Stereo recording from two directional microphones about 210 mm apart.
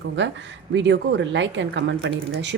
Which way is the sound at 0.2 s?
60° right (ahead or behind).